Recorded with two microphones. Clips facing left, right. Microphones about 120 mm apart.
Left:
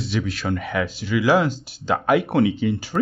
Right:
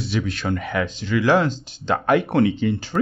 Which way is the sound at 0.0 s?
Centre (ahead or behind).